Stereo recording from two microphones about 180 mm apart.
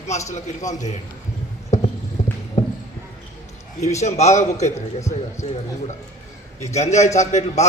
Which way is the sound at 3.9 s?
40° left (ahead or behind).